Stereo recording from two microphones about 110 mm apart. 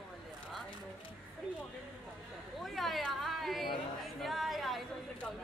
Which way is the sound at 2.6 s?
Centre (ahead or behind).